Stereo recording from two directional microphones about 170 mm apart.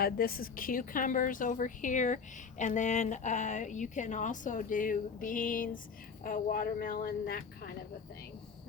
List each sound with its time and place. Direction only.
0.0 s a woman's voice: 60° left (ahead or behind)